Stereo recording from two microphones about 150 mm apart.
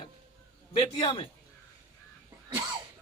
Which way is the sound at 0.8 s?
30° left (ahead or behind).